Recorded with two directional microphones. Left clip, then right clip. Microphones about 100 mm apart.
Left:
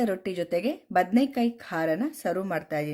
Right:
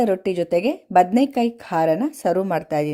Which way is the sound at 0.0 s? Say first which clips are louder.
Right 8 dB; 50° right (ahead or behind).